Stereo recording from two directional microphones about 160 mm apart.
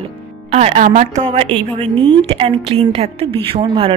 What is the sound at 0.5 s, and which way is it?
Speech, 40° right (ahead or behind).